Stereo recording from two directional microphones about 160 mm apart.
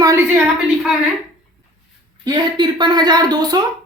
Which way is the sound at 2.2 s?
30° right (ahead or behind).